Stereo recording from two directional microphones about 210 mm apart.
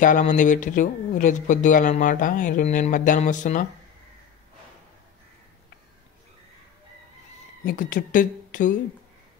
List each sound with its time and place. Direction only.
0.0 s speech: 35° left (ahead or behind)
7.6 s speech: 40° left (ahead or behind)